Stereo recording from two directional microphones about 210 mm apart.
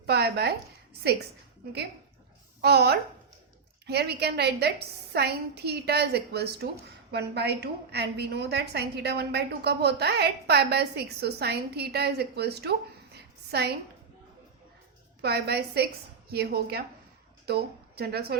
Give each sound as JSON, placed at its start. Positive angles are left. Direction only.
{"t": 0.0, "sound": "a sound", "side_deg": -50}
{"t": 2.6, "sound": "a woman's voice", "side_deg": -50}
{"t": 15.2, "sound": "a woman's voice", "side_deg": -50}